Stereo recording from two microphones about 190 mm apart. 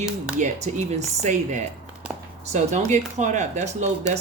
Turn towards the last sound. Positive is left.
turn(degrees=-40)  # may be behind; listen again after turning